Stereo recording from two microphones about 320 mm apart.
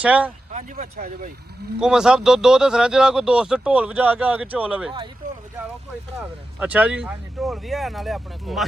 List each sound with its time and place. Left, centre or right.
0.0 s speech: centre
0.5 s speech: right
1.8 s speech: centre
6.6 s speech: centre